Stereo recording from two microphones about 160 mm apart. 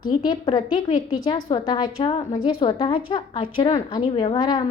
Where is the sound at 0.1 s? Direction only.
25° left (ahead or behind).